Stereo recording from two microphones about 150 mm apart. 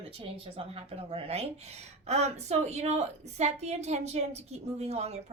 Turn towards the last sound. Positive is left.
turn(degrees=-45)  # may be behind; listen again after turning